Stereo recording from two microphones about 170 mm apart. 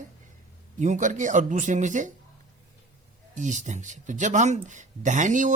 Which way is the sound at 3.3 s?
45° right (ahead or behind).